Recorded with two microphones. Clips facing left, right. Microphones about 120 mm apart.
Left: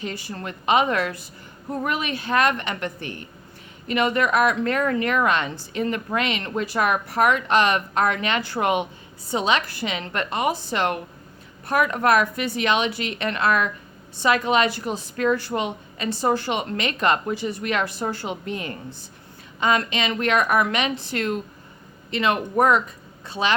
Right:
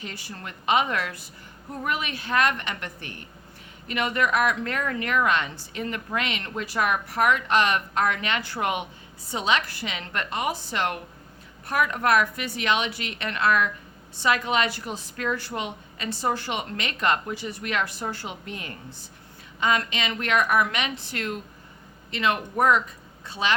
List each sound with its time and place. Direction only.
0.0 s a woman's voice: 25° left (ahead or behind)